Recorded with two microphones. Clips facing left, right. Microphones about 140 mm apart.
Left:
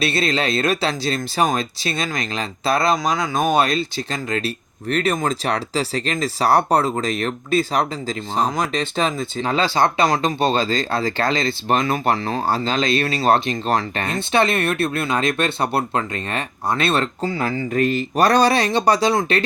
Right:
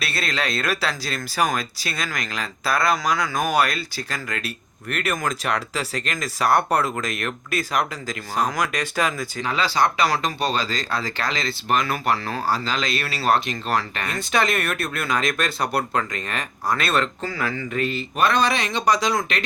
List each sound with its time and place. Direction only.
0.0 s speech: 25° left (ahead or behind)
17.7 s speech: 45° left (ahead or behind)